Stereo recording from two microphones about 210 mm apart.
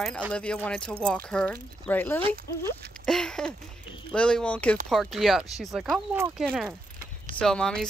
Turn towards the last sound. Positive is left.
turn(degrees=5)  # may be behind; listen again after turning